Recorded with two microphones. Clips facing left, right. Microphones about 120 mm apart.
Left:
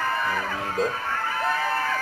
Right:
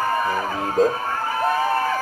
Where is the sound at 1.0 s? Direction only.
35° right (ahead or behind).